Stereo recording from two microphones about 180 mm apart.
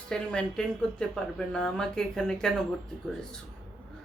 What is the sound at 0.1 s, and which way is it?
Speech, 5° left (ahead or behind).